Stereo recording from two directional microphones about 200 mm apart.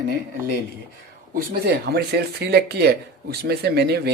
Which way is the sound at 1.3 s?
50° right (ahead or behind).